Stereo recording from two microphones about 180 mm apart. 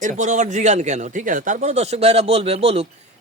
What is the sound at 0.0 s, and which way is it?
Speech, 45° right (ahead or behind).